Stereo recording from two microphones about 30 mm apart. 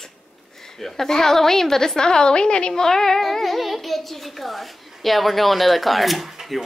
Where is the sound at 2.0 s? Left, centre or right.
Left.